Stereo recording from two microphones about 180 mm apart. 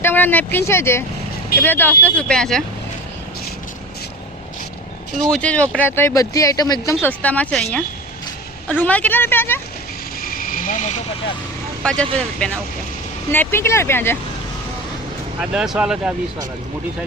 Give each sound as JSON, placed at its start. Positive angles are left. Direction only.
{"t": 0.0, "sound": "speech", "side_deg": 10}
{"t": 5.3, "sound": "speech", "side_deg": 5}
{"t": 10.2, "sound": "vehicle", "side_deg": 55}
{"t": 11.8, "sound": "speech", "side_deg": 5}
{"t": 13.3, "sound": "speech", "side_deg": 10}
{"t": 15.4, "sound": "speech", "side_deg": -5}